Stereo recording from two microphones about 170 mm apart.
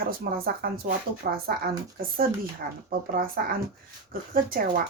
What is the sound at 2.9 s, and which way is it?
Speech, 55° right (ahead or behind).